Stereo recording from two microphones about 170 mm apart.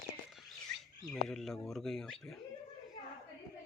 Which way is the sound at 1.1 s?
Centre (ahead or behind).